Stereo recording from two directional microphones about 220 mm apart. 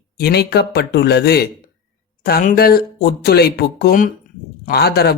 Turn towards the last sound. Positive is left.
turn(degrees=45)  # may be behind; listen again after turning